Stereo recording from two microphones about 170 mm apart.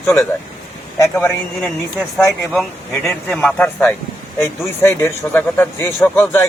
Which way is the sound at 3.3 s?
5° left (ahead or behind).